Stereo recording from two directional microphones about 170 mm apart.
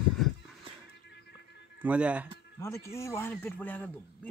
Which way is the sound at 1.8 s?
10° right (ahead or behind).